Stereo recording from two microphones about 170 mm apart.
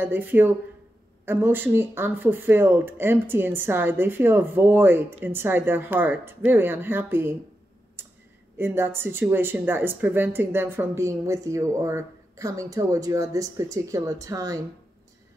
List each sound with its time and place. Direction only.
0.0 s speech: 10° right (ahead or behind)
8.5 s speech: 15° right (ahead or behind)